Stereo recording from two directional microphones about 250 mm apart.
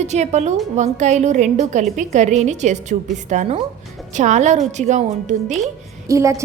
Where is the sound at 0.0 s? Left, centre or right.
Right.